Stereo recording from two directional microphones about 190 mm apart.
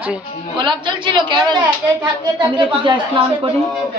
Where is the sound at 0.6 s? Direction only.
25° right (ahead or behind).